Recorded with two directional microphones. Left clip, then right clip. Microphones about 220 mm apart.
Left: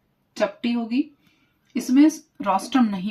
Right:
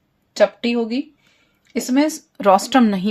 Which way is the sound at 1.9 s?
50° right (ahead or behind).